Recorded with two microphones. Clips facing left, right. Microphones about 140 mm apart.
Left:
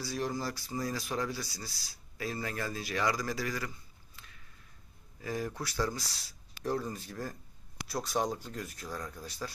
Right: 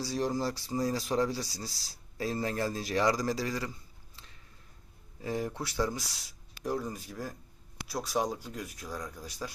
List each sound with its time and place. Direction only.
0.0 s speech: 35° right (ahead or behind)
4.2 s a sound: 30° right (ahead or behind)
5.2 s speech: 25° right (ahead or behind)